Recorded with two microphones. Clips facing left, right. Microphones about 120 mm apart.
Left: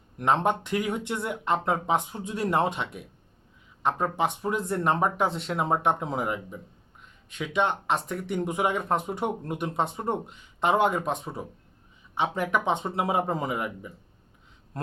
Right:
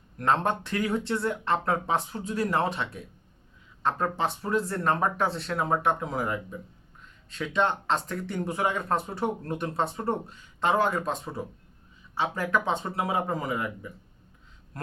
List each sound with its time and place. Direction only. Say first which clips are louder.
0.2 s speech: left 1 dB; 15° left (ahead or behind)